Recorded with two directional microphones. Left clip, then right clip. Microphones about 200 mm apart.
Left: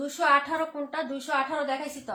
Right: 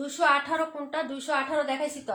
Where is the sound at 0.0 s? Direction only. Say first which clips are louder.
Left 1 dB; 20° right (ahead or behind).